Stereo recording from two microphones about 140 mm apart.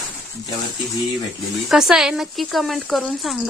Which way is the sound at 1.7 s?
Centre (ahead or behind).